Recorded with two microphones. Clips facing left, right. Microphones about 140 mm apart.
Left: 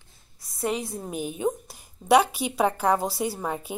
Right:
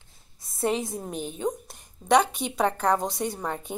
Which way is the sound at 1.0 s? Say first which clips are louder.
Left 2 dB; 5° left (ahead or behind).